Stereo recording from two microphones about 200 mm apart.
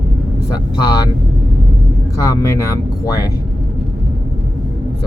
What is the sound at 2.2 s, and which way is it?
Speech, 15° left (ahead or behind).